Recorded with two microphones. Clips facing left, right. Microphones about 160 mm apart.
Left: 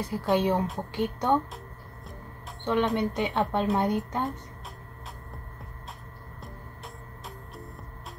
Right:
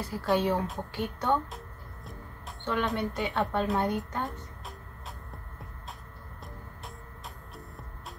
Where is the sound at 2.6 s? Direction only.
20° left (ahead or behind).